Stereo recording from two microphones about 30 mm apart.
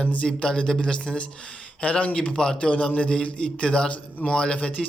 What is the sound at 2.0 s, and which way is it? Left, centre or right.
Speech, left.